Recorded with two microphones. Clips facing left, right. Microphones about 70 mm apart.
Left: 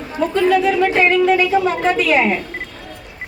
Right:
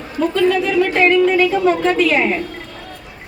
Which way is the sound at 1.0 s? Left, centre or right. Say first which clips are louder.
Right 1 dB; centre.